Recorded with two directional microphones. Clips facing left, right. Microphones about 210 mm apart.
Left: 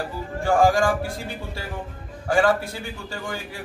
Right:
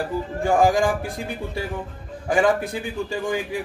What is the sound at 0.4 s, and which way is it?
Speech, 15° right (ahead or behind).